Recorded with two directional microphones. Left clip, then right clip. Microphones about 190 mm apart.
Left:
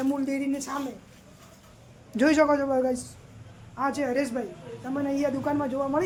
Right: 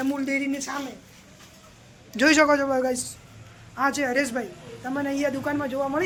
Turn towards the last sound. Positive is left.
turn(degrees=10)  # may be behind; listen again after turning